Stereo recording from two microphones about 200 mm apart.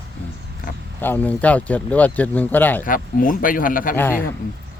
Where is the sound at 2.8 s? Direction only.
45° left (ahead or behind).